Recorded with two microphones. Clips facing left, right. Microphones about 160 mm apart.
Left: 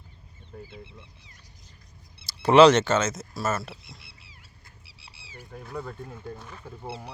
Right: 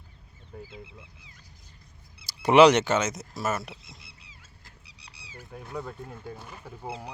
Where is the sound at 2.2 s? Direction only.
15° right (ahead or behind).